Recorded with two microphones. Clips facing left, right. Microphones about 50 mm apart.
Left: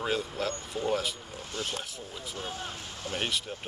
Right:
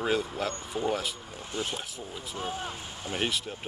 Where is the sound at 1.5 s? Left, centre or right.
Centre.